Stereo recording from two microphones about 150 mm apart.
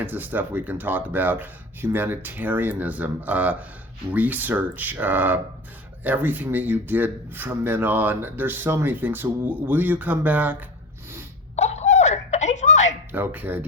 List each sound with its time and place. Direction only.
0.0 s speech: 10° right (ahead or behind)
11.5 s a sound: 45° left (ahead or behind)
13.1 s speech: 10° right (ahead or behind)